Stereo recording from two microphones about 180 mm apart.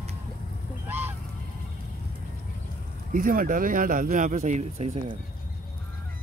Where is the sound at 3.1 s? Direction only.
50° right (ahead or behind).